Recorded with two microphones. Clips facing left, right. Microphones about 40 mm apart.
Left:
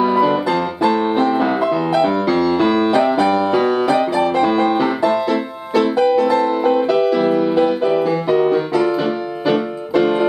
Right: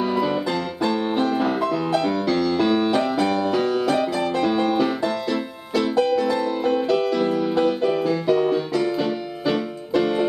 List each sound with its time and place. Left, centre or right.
0.0 s music: centre